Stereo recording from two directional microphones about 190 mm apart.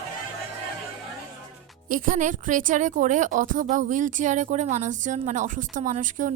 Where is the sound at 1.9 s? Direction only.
45° right (ahead or behind).